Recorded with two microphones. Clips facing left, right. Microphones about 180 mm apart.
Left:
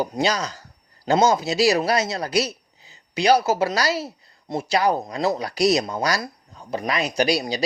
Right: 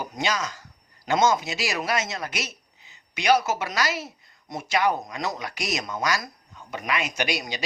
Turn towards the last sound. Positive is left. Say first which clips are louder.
# left 7 dB
turn(degrees=35)  # may be behind; listen again after turning